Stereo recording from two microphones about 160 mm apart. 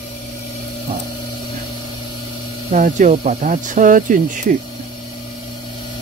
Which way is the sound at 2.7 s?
50° right (ahead or behind).